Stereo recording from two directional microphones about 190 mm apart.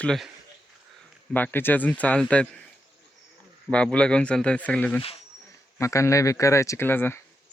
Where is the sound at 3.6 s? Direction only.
5° left (ahead or behind).